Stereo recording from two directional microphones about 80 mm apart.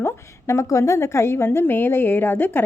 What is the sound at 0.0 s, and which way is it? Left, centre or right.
A woman's voice, left.